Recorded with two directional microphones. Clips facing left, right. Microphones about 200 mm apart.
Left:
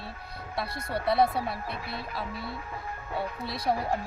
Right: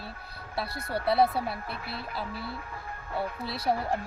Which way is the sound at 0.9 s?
Centre (ahead or behind).